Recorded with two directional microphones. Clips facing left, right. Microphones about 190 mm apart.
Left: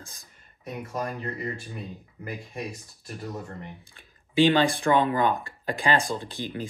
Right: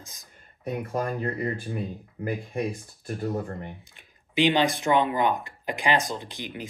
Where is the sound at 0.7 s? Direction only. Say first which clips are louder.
Right 4 dB; 55° right (ahead or behind).